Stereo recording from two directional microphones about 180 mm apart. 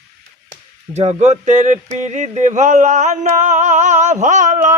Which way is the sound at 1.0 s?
40° right (ahead or behind).